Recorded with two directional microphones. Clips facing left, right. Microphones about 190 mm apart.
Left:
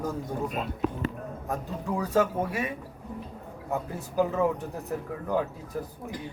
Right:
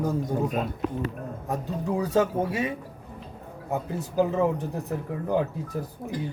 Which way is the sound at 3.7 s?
25° right (ahead or behind).